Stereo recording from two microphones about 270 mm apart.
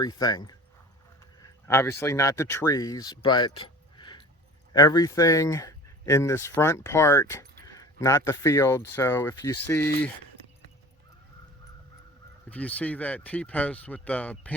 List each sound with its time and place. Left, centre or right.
0.0 s speech: centre
12.5 s speech: centre